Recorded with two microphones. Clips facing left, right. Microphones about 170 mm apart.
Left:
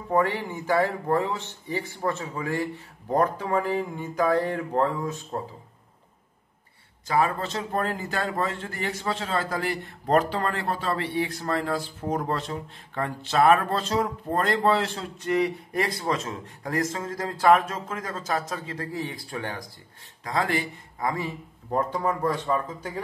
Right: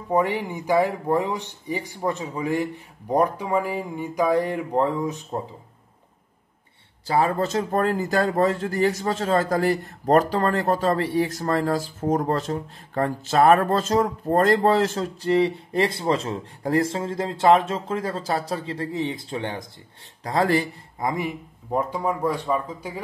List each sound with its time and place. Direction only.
0.1 s speech: 15° right (ahead or behind)
7.1 s speech: 35° right (ahead or behind)
15.2 s speech: 30° right (ahead or behind)
20.2 s speech: 40° right (ahead or behind)
21.0 s speech: 20° right (ahead or behind)